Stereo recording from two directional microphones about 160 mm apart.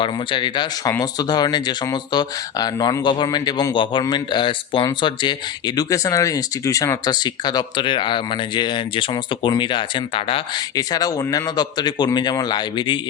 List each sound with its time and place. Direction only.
0.0 s speech: 30° left (ahead or behind)